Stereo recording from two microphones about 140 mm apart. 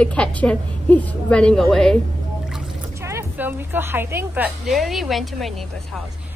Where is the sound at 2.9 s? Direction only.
20° right (ahead or behind).